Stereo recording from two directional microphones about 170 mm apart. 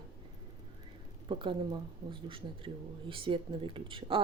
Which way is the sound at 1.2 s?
30° right (ahead or behind).